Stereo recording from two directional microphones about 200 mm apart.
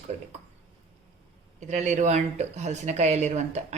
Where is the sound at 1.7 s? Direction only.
35° right (ahead or behind).